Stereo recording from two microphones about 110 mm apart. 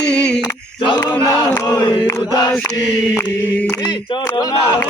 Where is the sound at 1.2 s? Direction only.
35° left (ahead or behind).